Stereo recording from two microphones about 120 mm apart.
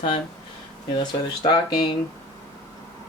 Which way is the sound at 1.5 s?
40° left (ahead or behind).